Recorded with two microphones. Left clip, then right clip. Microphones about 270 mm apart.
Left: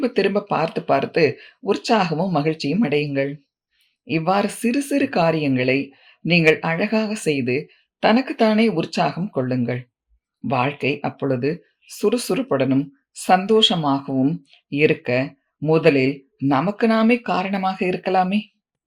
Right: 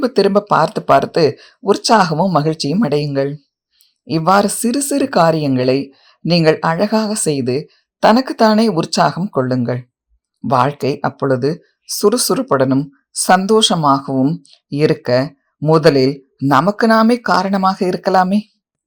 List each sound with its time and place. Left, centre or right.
0.0 s speech: right
7.7 s a sound: right
8.3 s speech: right
16.6 s speech: centre
16.9 s speech: right